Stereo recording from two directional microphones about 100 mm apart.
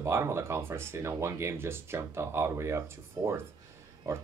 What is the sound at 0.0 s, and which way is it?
Speech, 25° right (ahead or behind).